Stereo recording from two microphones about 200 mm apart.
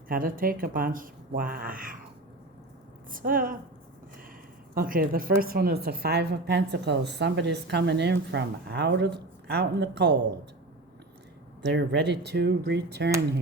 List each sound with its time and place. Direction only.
0.1 s speech: 45° right (ahead or behind)
3.1 s speech: 45° right (ahead or behind)
4.7 s a woman's voice: 45° right (ahead or behind)
11.7 s a woman's voice: 60° right (ahead or behind)